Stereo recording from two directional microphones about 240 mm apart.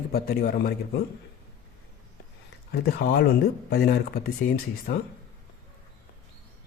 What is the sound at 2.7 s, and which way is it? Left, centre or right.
A man's voice, left.